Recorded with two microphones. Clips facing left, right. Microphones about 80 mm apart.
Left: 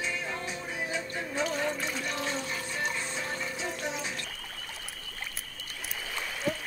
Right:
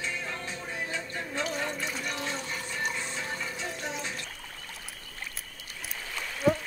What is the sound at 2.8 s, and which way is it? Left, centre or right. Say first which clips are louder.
Pump: right 1 dB; centre.